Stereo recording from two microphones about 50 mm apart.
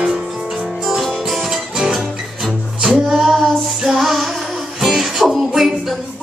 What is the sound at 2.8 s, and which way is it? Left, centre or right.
Music, centre.